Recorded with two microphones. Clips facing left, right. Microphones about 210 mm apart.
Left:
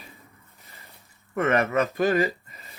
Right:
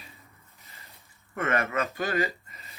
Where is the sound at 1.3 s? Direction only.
40° left (ahead or behind).